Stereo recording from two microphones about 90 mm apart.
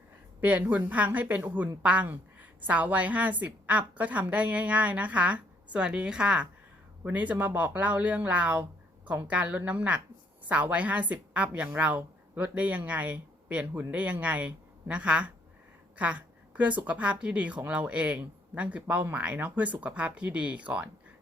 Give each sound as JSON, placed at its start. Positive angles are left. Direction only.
{"t": 0.4, "sound": "a woman's voice", "side_deg": -20}